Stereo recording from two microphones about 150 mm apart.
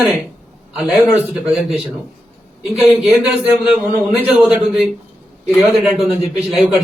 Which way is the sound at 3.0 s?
Centre (ahead or behind).